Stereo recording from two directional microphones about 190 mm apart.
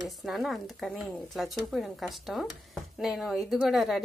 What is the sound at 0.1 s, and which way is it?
Speech, centre (ahead or behind).